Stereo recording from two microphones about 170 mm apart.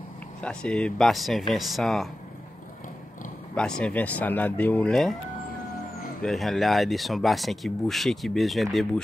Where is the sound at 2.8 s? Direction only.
50° left (ahead or behind).